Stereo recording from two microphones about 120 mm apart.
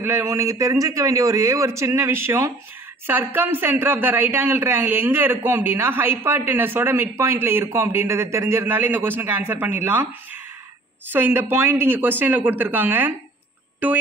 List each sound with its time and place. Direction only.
0.0 s a man's voice: 20° right (ahead or behind)
11.1 s speech: 15° right (ahead or behind)